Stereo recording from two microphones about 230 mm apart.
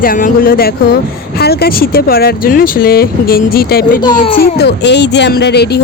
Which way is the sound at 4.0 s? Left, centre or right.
Centre.